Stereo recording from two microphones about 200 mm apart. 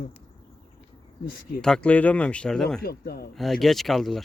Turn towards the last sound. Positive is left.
turn(degrees=0)  # may be behind; listen again after turning